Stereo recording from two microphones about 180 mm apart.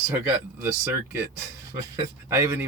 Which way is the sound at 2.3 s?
15° right (ahead or behind).